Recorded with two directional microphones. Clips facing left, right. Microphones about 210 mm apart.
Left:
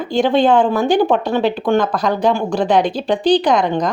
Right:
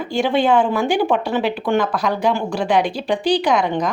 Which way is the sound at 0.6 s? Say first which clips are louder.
Left 3 dB; 20° left (ahead or behind).